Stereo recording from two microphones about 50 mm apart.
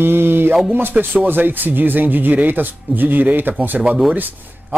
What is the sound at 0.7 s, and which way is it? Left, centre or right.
A man's voice, right.